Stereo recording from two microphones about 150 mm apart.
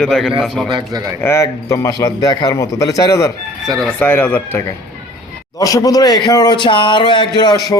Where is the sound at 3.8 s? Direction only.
10° left (ahead or behind).